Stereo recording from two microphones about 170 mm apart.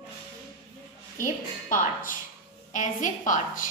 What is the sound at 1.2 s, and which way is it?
A woman's voice, 50° left (ahead or behind).